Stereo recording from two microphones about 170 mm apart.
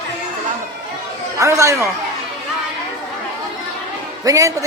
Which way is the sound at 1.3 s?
15° right (ahead or behind).